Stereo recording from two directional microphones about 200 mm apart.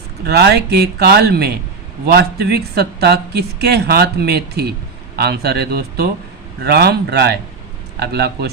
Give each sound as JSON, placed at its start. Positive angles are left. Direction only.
{"t": 0.3, "sound": "speech", "side_deg": -55}